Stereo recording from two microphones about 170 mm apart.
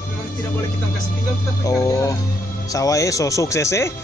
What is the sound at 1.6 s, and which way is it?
Speech, 20° left (ahead or behind).